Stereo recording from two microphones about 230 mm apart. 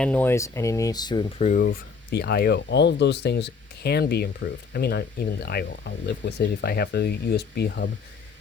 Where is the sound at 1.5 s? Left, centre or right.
Left.